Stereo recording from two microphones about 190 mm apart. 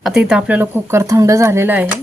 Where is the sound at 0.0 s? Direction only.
Centre (ahead or behind).